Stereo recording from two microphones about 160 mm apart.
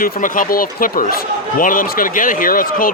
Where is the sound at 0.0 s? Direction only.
60° left (ahead or behind).